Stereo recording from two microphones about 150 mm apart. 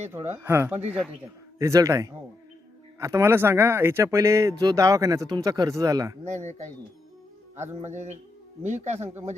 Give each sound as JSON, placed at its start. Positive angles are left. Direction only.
{"t": 0.3, "sound": "speech", "side_deg": -15}
{"t": 0.9, "sound": "a man's voice", "side_deg": -5}
{"t": 1.5, "sound": "speech", "side_deg": -20}
{"t": 6.2, "sound": "speech", "side_deg": -50}
{"t": 7.8, "sound": "speech", "side_deg": -50}